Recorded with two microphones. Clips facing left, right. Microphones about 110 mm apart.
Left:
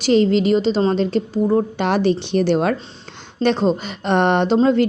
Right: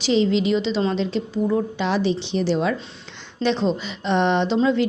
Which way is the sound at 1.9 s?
55° left (ahead or behind).